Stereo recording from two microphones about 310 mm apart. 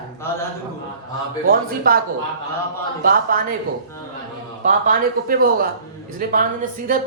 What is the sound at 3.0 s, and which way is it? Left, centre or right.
Speech, right.